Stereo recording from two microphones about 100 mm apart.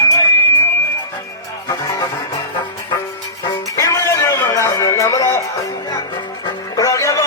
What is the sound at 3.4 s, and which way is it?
Music, 35° left (ahead or behind).